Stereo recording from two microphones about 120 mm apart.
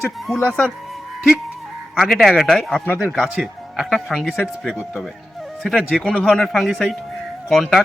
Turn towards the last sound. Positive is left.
turn(degrees=5)  # may be behind; listen again after turning